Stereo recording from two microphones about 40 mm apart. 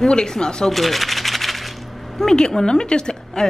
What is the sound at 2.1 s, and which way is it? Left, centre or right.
Speech, centre.